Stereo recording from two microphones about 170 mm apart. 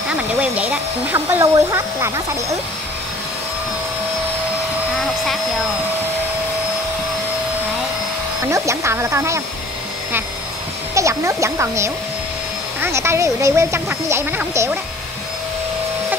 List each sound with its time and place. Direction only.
0.1 s speech: 5° right (ahead or behind)
8.5 s speech: 20° right (ahead or behind)
11.0 s speech: 15° right (ahead or behind)